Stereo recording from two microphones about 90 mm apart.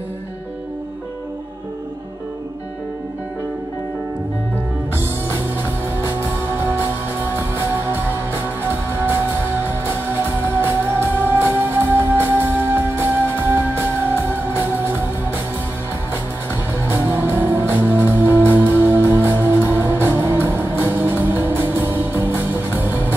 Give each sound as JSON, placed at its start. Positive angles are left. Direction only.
{"t": 4.9, "sound": "music", "side_deg": -25}
{"t": 6.6, "sound": "music", "side_deg": -25}
{"t": 10.6, "sound": "music", "side_deg": -25}
{"t": 16.8, "sound": "music", "side_deg": -25}